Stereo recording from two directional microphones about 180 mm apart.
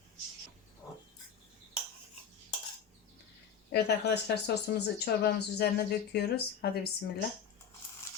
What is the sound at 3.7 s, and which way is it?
A woman's voice, 65° left (ahead or behind).